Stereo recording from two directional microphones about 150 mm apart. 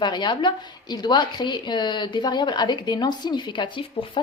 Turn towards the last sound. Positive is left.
turn(degrees=35)  # may be behind; listen again after turning